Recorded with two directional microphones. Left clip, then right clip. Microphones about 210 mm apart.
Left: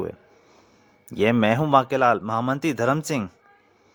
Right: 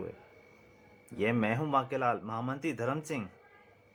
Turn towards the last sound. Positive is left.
turn(degrees=45)  # may be behind; listen again after turning